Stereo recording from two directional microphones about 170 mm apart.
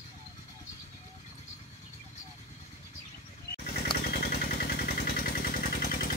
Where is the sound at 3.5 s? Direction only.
70° left (ahead or behind).